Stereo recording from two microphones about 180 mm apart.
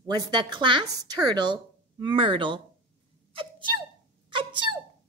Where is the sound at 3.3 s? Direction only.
25° right (ahead or behind).